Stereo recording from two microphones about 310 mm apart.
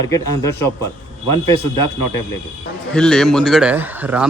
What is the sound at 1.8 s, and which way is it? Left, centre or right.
Speech, left.